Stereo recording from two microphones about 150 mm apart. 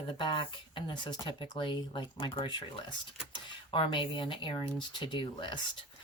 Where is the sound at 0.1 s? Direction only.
35° left (ahead or behind).